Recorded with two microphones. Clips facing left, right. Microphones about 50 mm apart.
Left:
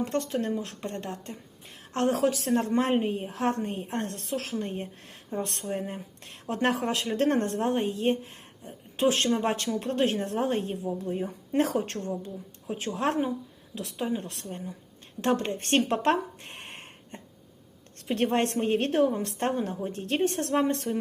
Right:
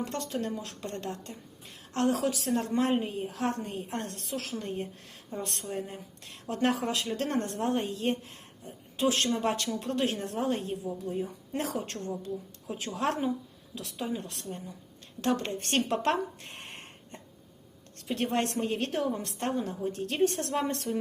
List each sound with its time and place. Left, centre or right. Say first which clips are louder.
0.0 s a woman's voice: left 4 dB; left
7.8 s a woman's voice: left 4 dB; left